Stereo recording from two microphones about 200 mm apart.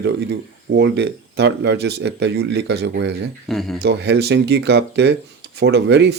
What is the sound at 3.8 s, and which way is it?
Speech, 55° right (ahead or behind).